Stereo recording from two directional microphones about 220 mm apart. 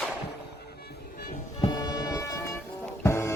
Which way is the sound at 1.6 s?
20° left (ahead or behind).